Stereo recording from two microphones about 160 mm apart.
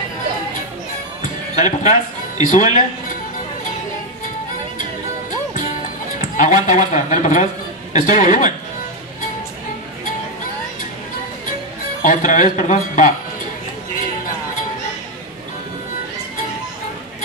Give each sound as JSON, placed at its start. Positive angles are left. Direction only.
{"t": 1.5, "sound": "speech", "side_deg": 50}
{"t": 6.3, "sound": "speech", "side_deg": 50}
{"t": 12.0, "sound": "speech", "side_deg": 50}